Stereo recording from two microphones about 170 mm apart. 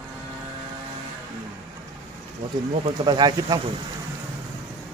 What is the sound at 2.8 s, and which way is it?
Speech, 25° right (ahead or behind).